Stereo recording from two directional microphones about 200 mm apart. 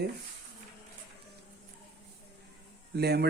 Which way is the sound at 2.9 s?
55° right (ahead or behind).